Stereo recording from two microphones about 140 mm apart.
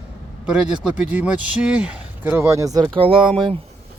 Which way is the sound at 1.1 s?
10° right (ahead or behind).